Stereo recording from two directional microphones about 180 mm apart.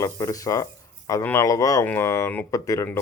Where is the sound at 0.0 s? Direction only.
20° left (ahead or behind).